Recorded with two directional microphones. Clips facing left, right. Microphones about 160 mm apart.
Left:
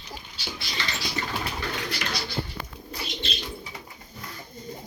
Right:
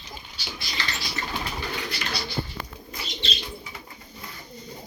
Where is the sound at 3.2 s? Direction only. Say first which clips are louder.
Right 4 dB; 50° left (ahead or behind).